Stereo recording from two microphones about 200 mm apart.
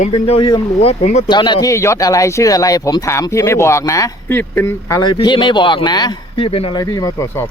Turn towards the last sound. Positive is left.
turn(degrees=15)  # may be behind; listen again after turning